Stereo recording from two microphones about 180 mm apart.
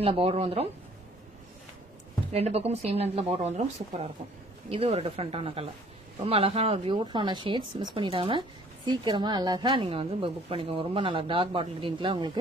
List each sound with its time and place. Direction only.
0.0 s speech: 30° right (ahead or behind)
2.3 s speech: 35° right (ahead or behind)